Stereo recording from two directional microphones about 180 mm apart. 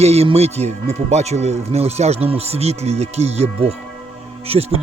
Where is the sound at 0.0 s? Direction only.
35° right (ahead or behind).